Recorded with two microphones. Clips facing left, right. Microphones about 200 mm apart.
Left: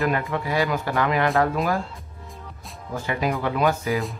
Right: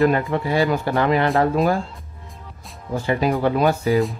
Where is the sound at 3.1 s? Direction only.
30° right (ahead or behind).